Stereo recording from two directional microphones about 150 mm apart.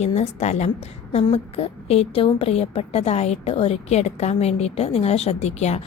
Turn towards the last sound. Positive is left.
turn(degrees=45)  # may be behind; listen again after turning